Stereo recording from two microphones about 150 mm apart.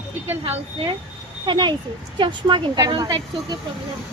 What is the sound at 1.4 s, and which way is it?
Speech, 30° right (ahead or behind).